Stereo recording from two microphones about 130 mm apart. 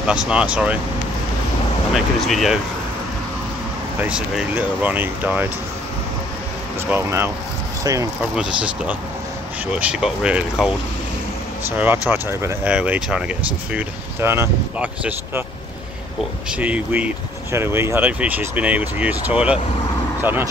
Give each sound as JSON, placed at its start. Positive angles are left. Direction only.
{"t": 0.0, "sound": "speech", "side_deg": -5}
{"t": 2.0, "sound": "speech", "side_deg": 0}
{"t": 4.0, "sound": "speech", "side_deg": -10}
{"t": 6.9, "sound": "speech", "side_deg": -20}
{"t": 8.4, "sound": "speech", "side_deg": -10}
{"t": 11.7, "sound": "speech", "side_deg": -15}
{"t": 13.7, "sound": "speech", "side_deg": -20}
{"t": 16.4, "sound": "speech", "side_deg": -10}